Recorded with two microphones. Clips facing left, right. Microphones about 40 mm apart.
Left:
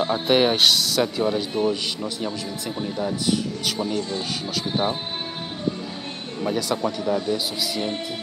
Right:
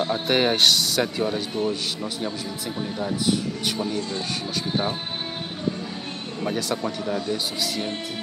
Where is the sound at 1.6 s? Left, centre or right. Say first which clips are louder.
Left 3 dB; left.